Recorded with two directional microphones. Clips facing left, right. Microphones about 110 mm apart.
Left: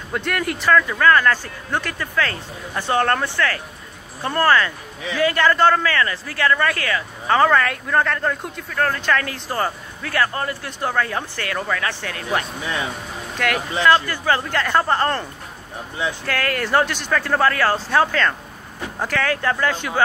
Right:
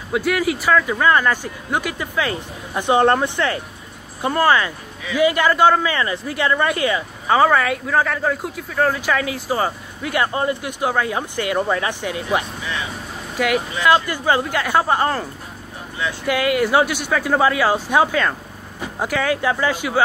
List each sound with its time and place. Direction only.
0.1 s a man's voice: 5° right (ahead or behind)
16.3 s a man's voice: 10° right (ahead or behind)